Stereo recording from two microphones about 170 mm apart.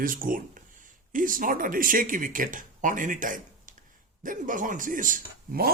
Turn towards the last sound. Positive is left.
turn(degrees=-55)  # may be behind; listen again after turning